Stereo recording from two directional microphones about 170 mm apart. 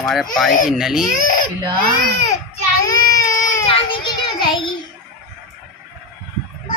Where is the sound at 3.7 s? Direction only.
25° left (ahead or behind).